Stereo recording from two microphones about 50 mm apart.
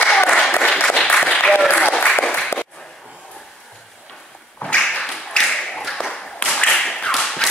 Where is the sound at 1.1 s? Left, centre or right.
Centre.